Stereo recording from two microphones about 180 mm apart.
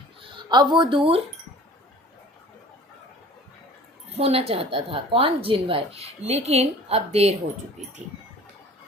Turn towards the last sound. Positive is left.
turn(degrees=-35)  # may be behind; listen again after turning